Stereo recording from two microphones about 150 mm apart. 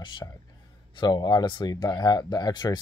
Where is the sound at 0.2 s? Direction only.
20° left (ahead or behind).